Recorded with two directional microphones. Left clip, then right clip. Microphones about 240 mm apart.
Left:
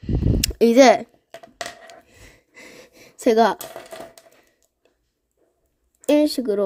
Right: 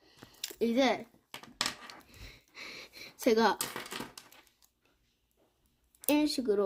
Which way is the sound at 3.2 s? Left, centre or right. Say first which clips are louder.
Left 10 dB; left.